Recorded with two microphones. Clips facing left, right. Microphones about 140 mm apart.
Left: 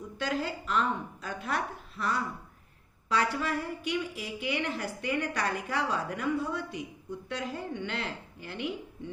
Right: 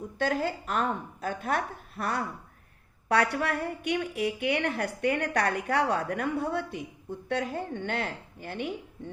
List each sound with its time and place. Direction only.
0.2 s a woman's voice: 50° right (ahead or behind)